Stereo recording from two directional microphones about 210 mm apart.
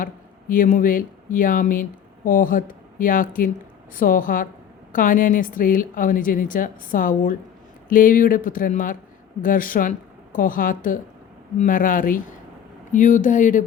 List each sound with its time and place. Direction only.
0.0 s a woman's voice: 40° left (ahead or behind)